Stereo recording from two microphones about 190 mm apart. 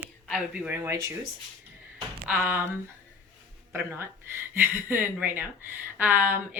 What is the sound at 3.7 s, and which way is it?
Speech, 10° right (ahead or behind).